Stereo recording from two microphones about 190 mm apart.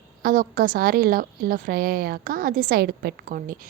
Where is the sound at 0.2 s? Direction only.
50° right (ahead or behind).